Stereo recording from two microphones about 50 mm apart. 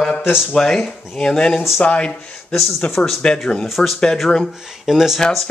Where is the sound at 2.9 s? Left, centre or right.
Centre.